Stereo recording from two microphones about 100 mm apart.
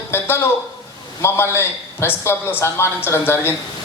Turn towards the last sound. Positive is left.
turn(degrees=25)  # may be behind; listen again after turning